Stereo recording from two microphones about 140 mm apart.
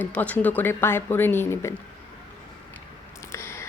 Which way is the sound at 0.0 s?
10° left (ahead or behind).